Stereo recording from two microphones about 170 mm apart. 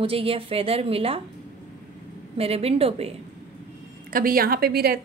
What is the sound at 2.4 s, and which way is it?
Speech, 35° right (ahead or behind).